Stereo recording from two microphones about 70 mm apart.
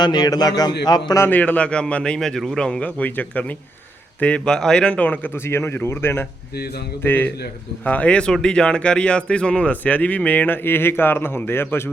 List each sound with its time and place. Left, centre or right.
0.0 s a man's voice: left
1.3 s a man's voice: left
5.5 s speech: left